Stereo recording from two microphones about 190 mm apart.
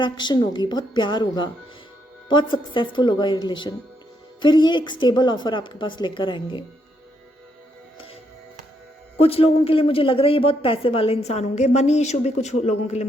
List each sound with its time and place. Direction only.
0.0 s a woman's voice: 25° left (ahead or behind)
9.1 s speech: 30° left (ahead or behind)